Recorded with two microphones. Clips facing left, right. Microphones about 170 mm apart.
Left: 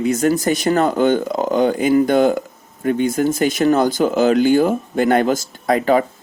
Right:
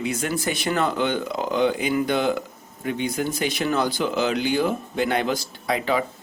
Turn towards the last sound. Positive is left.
turn(degrees=45)  # may be behind; listen again after turning